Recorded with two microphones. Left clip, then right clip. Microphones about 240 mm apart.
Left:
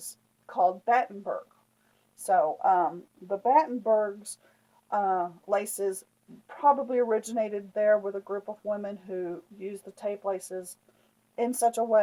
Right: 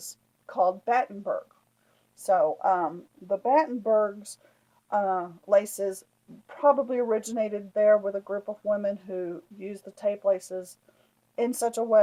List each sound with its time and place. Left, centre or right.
0.5 s speech: right